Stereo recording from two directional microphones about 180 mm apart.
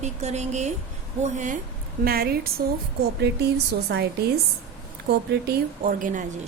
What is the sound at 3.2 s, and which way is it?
A woman's voice, 70° right (ahead or behind).